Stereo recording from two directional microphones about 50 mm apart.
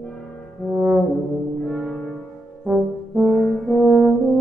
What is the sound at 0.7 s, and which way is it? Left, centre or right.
Brass instrument, centre.